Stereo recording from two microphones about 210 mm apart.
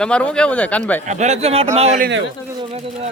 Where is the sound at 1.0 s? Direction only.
35° right (ahead or behind).